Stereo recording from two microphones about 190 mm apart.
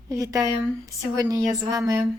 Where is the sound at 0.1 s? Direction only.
20° right (ahead or behind).